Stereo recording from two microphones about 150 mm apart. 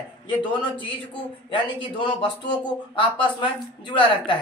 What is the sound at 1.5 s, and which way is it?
Speech, 35° left (ahead or behind).